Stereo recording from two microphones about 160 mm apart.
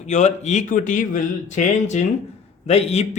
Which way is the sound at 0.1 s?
45° left (ahead or behind).